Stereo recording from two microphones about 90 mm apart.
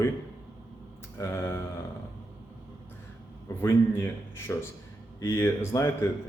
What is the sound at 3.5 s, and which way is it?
A man's voice, 40° left (ahead or behind).